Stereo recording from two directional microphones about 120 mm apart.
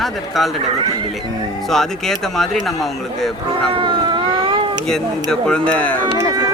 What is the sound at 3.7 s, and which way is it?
Cat, 40° right (ahead or behind).